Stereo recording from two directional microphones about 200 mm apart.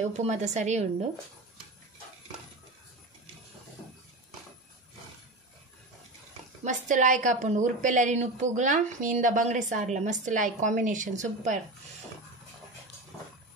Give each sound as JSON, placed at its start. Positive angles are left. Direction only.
{"t": 0.0, "sound": "a woman's voice", "side_deg": -35}
{"t": 6.6, "sound": "a woman's voice", "side_deg": -40}